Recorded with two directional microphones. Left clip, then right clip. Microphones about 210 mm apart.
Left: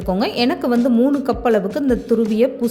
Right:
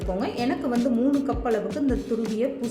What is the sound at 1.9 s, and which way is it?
Speech, centre (ahead or behind).